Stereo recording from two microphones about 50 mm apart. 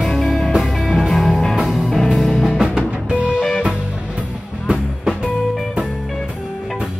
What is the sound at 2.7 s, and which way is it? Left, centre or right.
Music, right.